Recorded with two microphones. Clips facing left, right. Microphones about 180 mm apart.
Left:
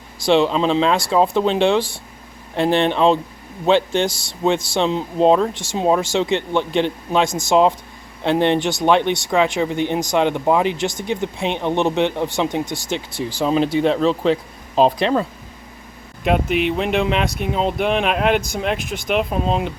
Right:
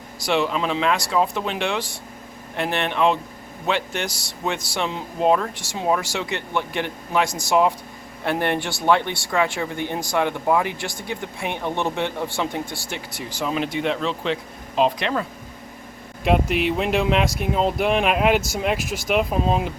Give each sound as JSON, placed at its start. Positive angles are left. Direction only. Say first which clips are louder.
{"t": 0.2, "sound": "speech", "louder": "left 6 dB", "side_deg": 30}
{"t": 16.2, "sound": "speech", "louder": "left 2 dB", "side_deg": 0}